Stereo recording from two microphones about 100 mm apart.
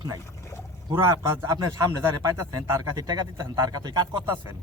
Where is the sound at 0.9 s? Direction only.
35° right (ahead or behind).